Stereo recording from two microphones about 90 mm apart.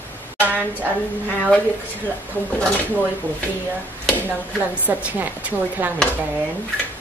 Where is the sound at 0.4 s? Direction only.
20° right (ahead or behind).